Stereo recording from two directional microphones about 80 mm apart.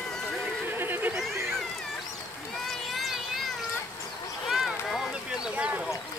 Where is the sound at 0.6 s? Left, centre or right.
Right.